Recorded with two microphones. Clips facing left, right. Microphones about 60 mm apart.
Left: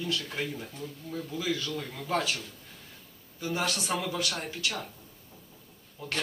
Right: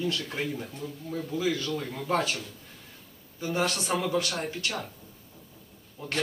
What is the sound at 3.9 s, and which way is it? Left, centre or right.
Speech, centre.